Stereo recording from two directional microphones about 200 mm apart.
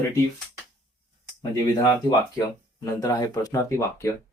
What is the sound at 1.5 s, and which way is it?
Speech, 20° left (ahead or behind).